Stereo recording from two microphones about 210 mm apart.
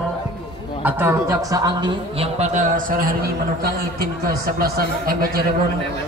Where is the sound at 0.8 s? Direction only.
10° right (ahead or behind); by 5.3 s 45° right (ahead or behind).